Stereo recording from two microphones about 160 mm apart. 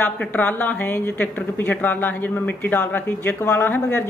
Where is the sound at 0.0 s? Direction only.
10° left (ahead or behind).